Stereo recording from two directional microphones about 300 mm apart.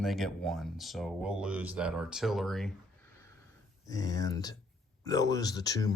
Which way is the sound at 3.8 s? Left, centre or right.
Centre.